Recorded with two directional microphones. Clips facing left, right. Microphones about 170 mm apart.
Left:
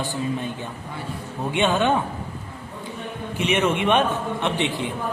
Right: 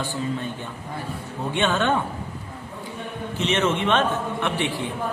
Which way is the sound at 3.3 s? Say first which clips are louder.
Left 1 dB; 10° left (ahead or behind).